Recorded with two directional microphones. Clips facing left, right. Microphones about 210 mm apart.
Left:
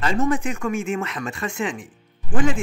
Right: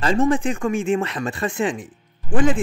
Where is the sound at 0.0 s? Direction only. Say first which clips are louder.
Right 3 dB; 30° right (ahead or behind).